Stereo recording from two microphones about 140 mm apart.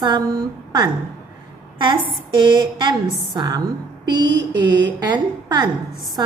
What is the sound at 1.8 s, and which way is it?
A woman's voice, 35° right (ahead or behind).